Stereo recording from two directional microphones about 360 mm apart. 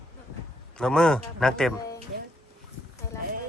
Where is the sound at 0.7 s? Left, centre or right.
Centre.